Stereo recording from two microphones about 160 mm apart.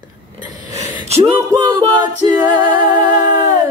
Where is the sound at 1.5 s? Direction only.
25° right (ahead or behind).